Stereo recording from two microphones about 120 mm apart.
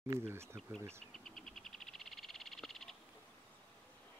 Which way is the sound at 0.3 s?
20° right (ahead or behind).